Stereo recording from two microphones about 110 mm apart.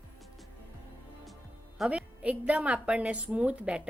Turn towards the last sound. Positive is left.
turn(degrees=-10)  # may be behind; listen again after turning